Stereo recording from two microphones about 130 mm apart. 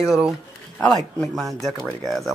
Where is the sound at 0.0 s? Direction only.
Centre (ahead or behind).